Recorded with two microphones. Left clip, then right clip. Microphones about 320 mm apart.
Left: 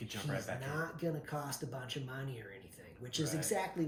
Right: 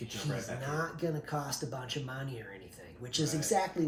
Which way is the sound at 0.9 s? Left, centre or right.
Centre.